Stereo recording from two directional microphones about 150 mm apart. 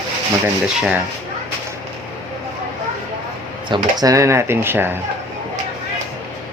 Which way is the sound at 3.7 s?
25° right (ahead or behind).